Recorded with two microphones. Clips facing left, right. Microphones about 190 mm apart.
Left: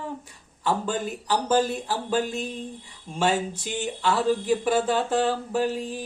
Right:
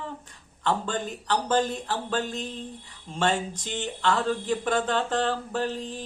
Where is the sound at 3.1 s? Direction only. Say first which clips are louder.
Left 2 dB; 10° left (ahead or behind).